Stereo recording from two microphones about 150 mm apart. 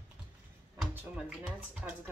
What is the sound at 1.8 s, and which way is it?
Speech, 5° right (ahead or behind).